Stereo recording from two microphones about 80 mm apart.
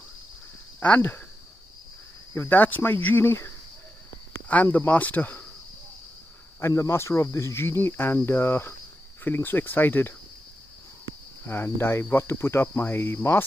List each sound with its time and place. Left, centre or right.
0.7 s speech: left
2.3 s speech: left
4.7 s speech: centre
6.7 s speech: left
11.4 s speech: left